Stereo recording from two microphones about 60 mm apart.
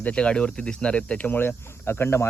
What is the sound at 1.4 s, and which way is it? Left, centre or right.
Cricket, left.